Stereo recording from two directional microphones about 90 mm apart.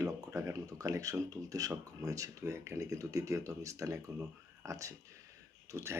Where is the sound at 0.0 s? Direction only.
35° right (ahead or behind).